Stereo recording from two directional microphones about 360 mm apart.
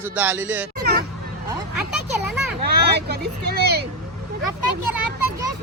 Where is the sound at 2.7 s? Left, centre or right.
Right.